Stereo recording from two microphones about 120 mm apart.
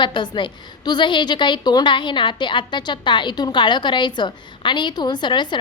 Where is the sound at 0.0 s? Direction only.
40° left (ahead or behind).